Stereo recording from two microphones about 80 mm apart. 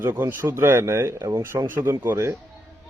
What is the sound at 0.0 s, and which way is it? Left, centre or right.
A man's voice, right.